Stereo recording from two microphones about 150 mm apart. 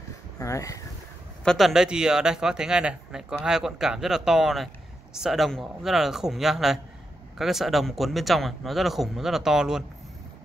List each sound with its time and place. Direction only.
0.4 s speech: 20° left (ahead or behind)
1.4 s speech: centre (ahead or behind)